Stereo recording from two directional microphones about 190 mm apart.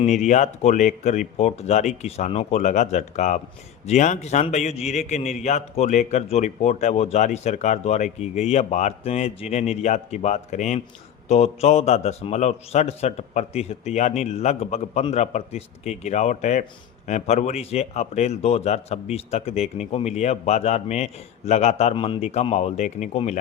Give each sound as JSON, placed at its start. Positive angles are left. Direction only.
{"t": 0.0, "sound": "a man's voice", "side_deg": 40}